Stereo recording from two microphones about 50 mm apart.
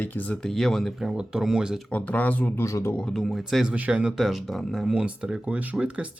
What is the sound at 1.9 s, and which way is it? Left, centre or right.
Speech, left.